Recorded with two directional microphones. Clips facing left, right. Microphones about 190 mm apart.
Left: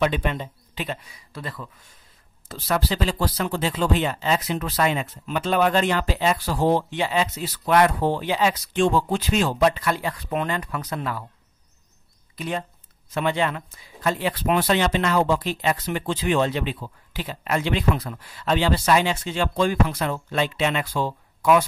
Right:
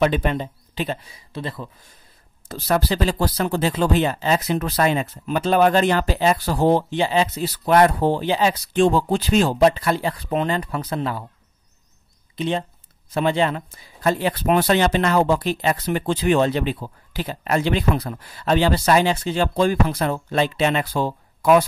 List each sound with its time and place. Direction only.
0.0 s speech: 40° right (ahead or behind)
2.4 s speech: 45° right (ahead or behind)
12.4 s speech: 25° right (ahead or behind)